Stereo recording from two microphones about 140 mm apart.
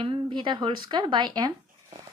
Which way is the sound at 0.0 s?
35° right (ahead or behind).